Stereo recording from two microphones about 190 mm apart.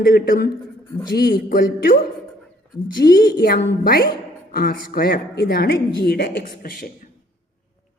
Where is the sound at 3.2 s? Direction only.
55° left (ahead or behind).